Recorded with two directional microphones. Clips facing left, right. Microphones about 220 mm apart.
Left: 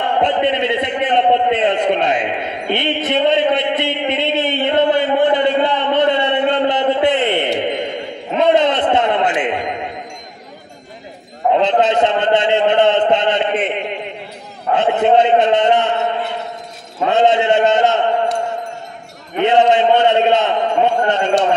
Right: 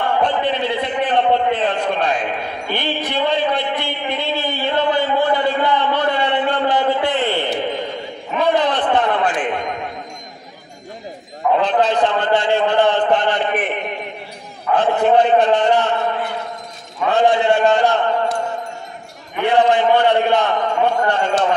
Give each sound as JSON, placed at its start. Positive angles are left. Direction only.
{"t": 0.2, "sound": "a man's voice", "side_deg": 20}
{"t": 11.5, "sound": "a man's voice", "side_deg": 20}
{"t": 19.3, "sound": "a man's voice", "side_deg": 20}